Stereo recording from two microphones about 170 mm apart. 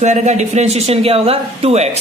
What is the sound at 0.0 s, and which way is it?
A man's voice, 45° right (ahead or behind).